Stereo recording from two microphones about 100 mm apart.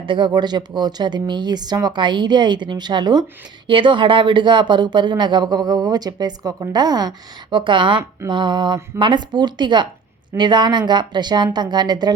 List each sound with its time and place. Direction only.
0.0 s speech: 55° right (ahead or behind)
3.7 s speech: 55° right (ahead or behind)
7.5 s speech: 55° right (ahead or behind)